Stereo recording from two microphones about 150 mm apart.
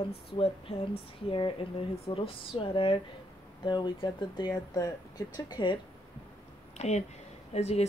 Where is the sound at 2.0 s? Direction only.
40° left (ahead or behind).